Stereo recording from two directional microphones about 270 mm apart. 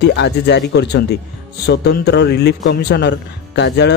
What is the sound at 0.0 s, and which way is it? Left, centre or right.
Speech, left.